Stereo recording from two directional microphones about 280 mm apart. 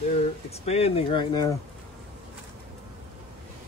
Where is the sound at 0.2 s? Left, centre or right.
Left.